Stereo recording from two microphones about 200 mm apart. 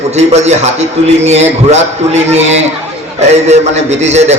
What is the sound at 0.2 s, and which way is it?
A man's voice, 35° right (ahead or behind).